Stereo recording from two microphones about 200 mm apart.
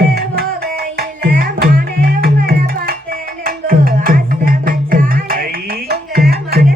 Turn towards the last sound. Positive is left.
turn(degrees=-50)  # may be behind; listen again after turning